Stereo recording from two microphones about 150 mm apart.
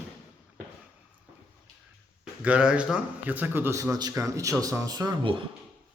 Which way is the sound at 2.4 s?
10° right (ahead or behind).